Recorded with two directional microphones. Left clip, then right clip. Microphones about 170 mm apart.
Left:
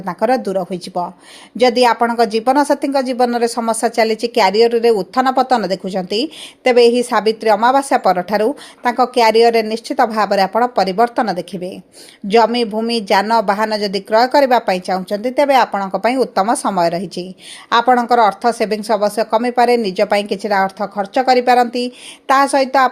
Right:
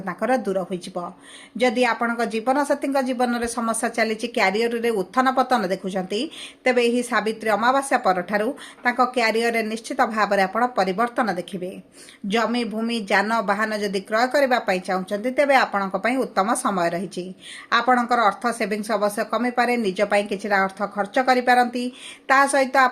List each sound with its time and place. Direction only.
0.0 s speech: 40° left (ahead or behind)